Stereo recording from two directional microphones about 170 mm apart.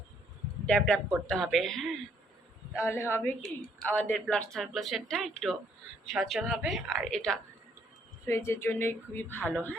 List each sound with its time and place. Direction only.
0.6 s speech: 5° left (ahead or behind)
2.8 s a woman's voice: 15° left (ahead or behind)
8.3 s a woman's voice: 15° left (ahead or behind)